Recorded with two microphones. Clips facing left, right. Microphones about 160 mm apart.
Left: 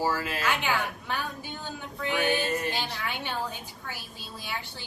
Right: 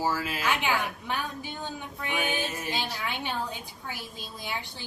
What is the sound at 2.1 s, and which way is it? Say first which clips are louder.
Music: left 4 dB; 15° right (ahead or behind).